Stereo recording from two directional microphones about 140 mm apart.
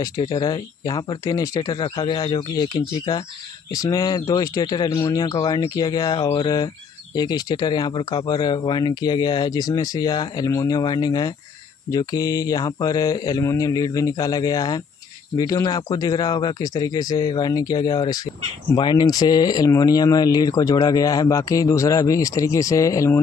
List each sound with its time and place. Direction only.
0.0 s speech: 30° left (ahead or behind)